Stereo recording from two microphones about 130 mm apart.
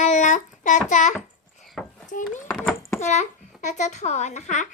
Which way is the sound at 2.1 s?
90° left.